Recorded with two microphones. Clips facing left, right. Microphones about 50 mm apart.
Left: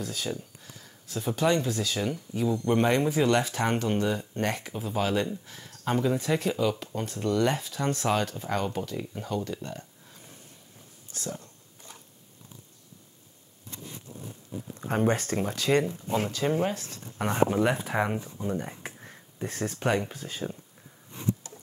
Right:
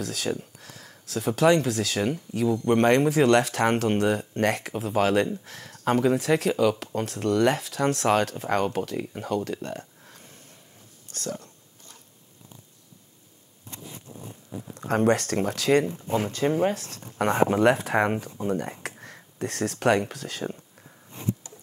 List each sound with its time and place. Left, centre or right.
0.0 s speech: right
2.7 s speech: right
5.7 s speech: right
6.1 s speech: right
11.1 s speech: right
14.9 s speech: right
15.7 s speech: centre
16.7 s speech: right
17.3 s speech: right
18.8 s a sound: right
19.3 s speech: right